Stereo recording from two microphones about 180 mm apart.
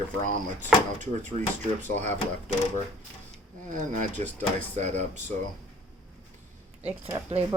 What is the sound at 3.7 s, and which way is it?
Speech, 45° right (ahead or behind).